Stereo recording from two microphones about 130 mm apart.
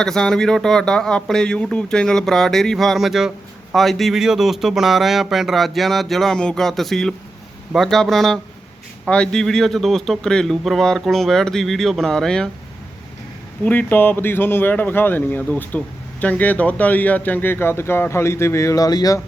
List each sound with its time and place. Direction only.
0.0 s speech: 5° left (ahead or behind)
13.7 s speech: 15° left (ahead or behind); by 19.2 s 30° left (ahead or behind)